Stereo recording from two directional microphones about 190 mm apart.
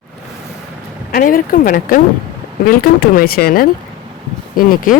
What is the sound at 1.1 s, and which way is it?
Speech, 45° left (ahead or behind).